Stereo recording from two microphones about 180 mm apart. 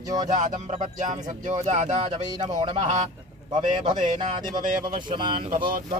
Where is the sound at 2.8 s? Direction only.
40° right (ahead or behind).